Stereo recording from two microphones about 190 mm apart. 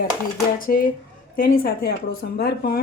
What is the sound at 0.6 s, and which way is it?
Speech, 45° left (ahead or behind).